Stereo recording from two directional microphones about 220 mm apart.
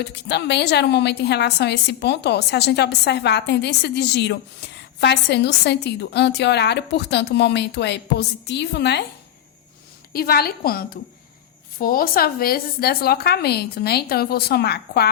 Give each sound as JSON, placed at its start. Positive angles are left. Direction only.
{"t": 0.0, "sound": "a woman's voice", "side_deg": 50}
{"t": 10.1, "sound": "a woman's voice", "side_deg": 45}